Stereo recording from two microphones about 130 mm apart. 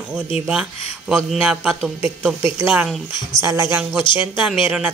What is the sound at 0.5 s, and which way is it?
Speech, 5° right (ahead or behind).